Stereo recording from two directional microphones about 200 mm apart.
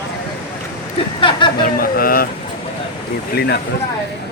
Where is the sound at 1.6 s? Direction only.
45° left (ahead or behind).